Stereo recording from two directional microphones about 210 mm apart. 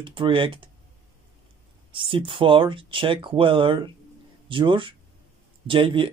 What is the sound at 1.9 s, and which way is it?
Speech, 25° right (ahead or behind).